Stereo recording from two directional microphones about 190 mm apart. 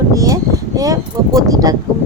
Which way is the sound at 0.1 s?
20° right (ahead or behind).